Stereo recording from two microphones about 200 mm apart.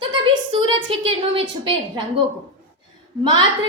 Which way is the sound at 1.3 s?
25° right (ahead or behind).